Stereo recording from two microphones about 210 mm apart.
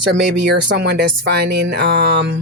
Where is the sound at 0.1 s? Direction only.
50° right (ahead or behind).